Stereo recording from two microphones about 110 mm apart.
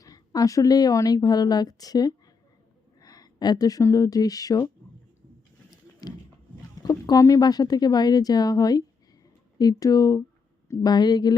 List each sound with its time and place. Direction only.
0.0 s a woman's voice: 35° left (ahead or behind)
6.0 s horse: 35° left (ahead or behind)
6.7 s a woman's voice: 35° left (ahead or behind)